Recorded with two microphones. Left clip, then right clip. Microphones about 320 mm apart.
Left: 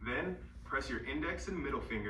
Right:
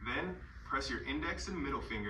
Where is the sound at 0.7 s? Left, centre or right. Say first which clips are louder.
Right 1 dB; right.